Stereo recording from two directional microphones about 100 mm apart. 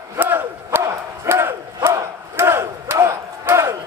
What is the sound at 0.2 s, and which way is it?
Battle cry, 20° right (ahead or behind).